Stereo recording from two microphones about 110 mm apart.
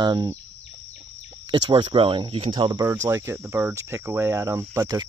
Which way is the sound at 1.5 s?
45° right (ahead or behind).